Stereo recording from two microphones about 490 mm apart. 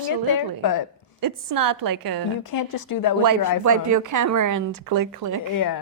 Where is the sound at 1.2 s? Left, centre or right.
Right.